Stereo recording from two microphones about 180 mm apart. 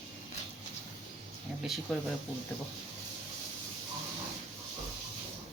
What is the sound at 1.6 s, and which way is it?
Speech, centre (ahead or behind).